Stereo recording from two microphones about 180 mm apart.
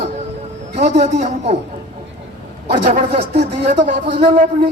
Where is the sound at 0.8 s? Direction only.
40° right (ahead or behind).